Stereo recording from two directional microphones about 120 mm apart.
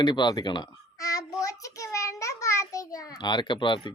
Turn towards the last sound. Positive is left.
turn(degrees=45)  # may be behind; listen again after turning